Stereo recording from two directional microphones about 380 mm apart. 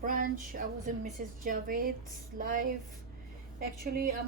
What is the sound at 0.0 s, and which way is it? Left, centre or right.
A woman's voice, right.